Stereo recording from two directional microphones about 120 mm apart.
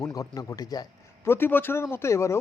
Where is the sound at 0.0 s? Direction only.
30° left (ahead or behind).